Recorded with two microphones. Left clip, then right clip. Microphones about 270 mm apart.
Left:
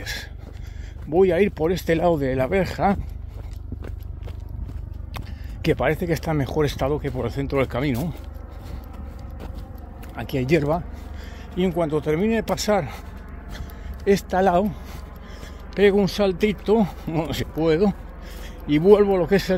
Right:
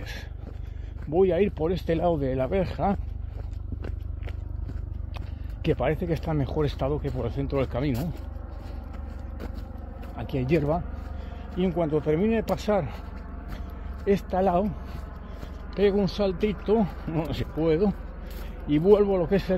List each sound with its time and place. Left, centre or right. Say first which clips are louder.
0.0 s gasp: left 9 dB; left
1.1 s speech: left 4 dB; left
5.1 s speech: left 7 dB; left
10.1 s speech: left 5 dB; left
14.0 s speech: left 5 dB; left